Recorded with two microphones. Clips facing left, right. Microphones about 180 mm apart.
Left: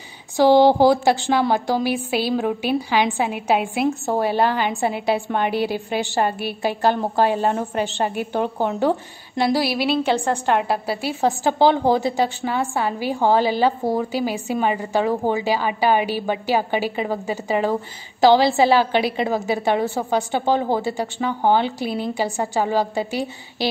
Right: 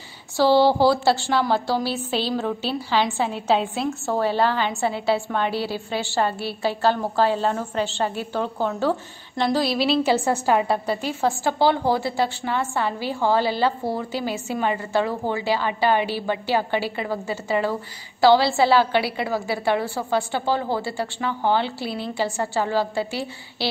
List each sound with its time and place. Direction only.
0.4 s a woman's voice: 15° left (ahead or behind)
9.8 s a woman's voice: centre (ahead or behind); by 23.7 s 15° left (ahead or behind)